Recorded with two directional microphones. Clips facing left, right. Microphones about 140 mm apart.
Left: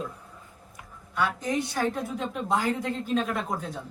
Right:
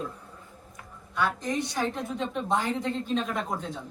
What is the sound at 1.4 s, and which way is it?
Speech, 5° left (ahead or behind).